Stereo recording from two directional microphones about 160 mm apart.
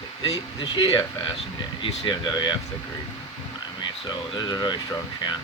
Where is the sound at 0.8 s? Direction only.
30° left (ahead or behind).